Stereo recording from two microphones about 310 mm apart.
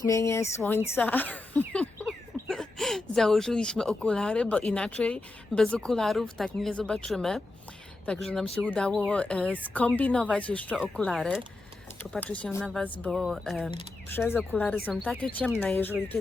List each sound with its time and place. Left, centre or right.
0.0 s speech: centre
13.7 s speech: centre